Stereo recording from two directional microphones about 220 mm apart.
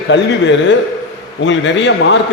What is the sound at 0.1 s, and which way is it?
A man's voice, 55° left (ahead or behind).